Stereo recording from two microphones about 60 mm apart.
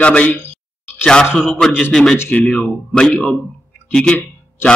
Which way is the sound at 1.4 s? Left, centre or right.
Centre.